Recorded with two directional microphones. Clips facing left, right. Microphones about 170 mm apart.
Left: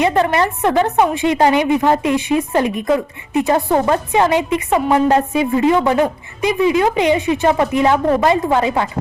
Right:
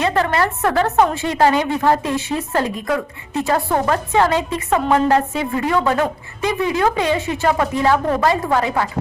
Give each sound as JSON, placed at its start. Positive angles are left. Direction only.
{"t": 0.0, "sound": "a woman's voice", "side_deg": 20}